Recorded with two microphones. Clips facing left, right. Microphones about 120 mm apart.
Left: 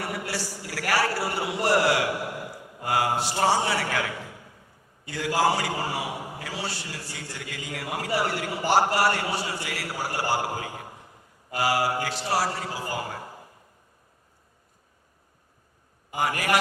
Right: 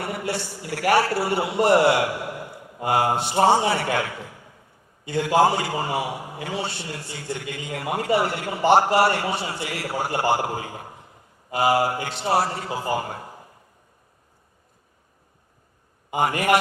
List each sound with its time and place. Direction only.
0.0 s a man's voice: 25° right (ahead or behind)
5.0 s a man's voice: 25° right (ahead or behind)
16.1 s a man's voice: 25° right (ahead or behind)